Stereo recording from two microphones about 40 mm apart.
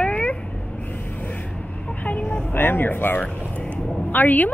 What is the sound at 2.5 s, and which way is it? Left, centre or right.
A woman's voice, left.